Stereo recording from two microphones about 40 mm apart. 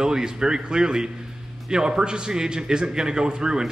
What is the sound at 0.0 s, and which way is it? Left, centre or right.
A man's voice, centre.